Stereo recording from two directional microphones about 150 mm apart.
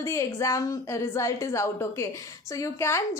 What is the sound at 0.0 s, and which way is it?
A woman's voice, 20° left (ahead or behind).